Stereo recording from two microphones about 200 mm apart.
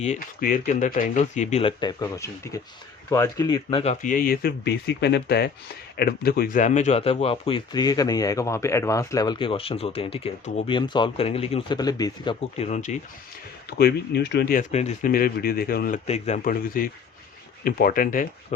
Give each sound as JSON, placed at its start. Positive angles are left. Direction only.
{"t": 0.0, "sound": "speech", "side_deg": 40}
{"t": 4.0, "sound": "speech", "side_deg": 45}
{"t": 13.7, "sound": "speech", "side_deg": 55}
{"t": 14.7, "sound": "speech", "side_deg": 35}
{"t": 15.1, "sound": "speech", "side_deg": 50}
{"t": 16.0, "sound": "speech", "side_deg": 35}